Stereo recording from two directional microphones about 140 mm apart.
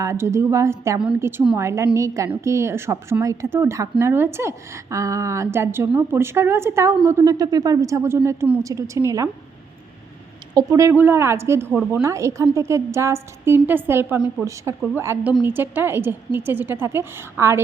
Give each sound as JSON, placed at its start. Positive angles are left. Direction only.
{"t": 0.0, "sound": "speech", "side_deg": -20}
{"t": 10.5, "sound": "a woman's voice", "side_deg": -25}